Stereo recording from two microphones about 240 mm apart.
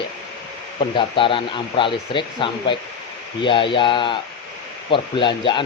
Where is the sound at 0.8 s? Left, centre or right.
Left.